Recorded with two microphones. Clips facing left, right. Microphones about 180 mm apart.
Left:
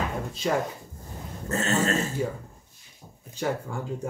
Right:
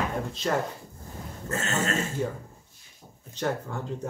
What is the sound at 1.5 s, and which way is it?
Speech, 35° left (ahead or behind).